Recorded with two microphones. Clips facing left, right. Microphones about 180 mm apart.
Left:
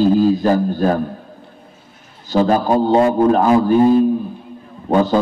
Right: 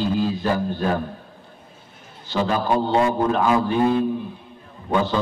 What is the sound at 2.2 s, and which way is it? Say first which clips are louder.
Speech: left 7 dB; 45° left (ahead or behind).